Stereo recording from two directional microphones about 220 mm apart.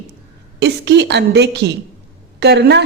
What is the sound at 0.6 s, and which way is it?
A woman's voice, 50° right (ahead or behind).